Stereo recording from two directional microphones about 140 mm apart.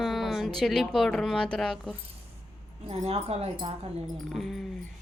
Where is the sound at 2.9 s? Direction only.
45° right (ahead or behind).